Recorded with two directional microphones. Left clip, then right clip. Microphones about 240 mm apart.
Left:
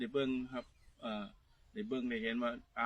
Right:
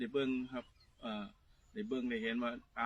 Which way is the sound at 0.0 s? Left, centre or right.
Centre.